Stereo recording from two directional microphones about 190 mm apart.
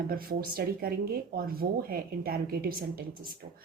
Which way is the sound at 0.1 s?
50° right (ahead or behind).